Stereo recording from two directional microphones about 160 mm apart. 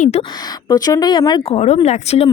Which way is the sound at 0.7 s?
25° left (ahead or behind).